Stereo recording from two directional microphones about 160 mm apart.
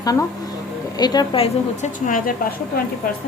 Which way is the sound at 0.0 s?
20° left (ahead or behind).